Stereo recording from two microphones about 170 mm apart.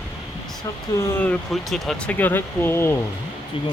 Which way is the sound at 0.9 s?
15° left (ahead or behind).